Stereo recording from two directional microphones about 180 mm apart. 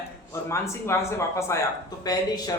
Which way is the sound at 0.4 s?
15° left (ahead or behind).